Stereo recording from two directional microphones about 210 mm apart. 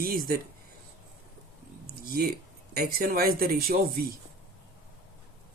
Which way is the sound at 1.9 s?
45° right (ahead or behind).